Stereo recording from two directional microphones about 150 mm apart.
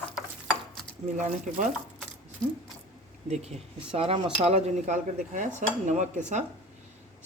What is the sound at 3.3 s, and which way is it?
Speech, 45° right (ahead or behind).